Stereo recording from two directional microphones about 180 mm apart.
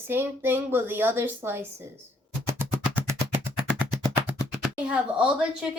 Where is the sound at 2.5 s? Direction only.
10° right (ahead or behind).